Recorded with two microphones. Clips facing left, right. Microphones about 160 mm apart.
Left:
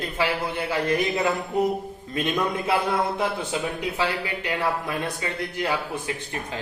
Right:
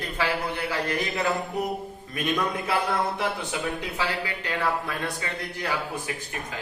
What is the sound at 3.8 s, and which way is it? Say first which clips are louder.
A man's voice: left 3 dB; 20° left (ahead or behind).